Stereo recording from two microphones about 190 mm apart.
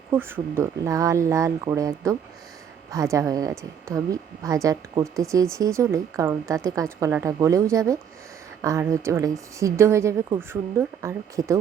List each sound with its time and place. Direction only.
0.1 s speech: 10° right (ahead or behind)